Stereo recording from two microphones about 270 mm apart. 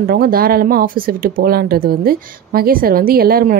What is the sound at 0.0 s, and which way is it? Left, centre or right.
A woman's voice, right.